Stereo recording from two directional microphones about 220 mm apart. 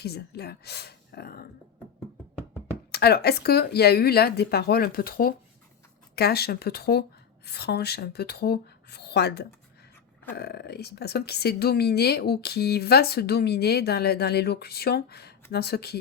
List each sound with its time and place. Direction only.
0.0 s speech: 45° left (ahead or behind)
2.9 s speech: 45° left (ahead or behind)